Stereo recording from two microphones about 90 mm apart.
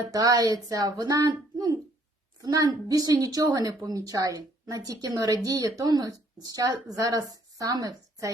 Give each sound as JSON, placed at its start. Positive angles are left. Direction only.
{"t": 0.1, "sound": "a woman's voice", "side_deg": -40}